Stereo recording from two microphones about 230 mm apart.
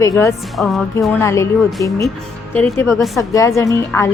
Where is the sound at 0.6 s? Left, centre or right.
Centre.